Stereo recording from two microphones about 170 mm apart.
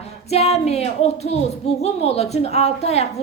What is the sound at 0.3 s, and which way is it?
A woman's voice, 40° left (ahead or behind).